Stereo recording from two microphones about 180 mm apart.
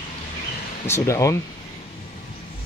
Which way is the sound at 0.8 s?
15° left (ahead or behind).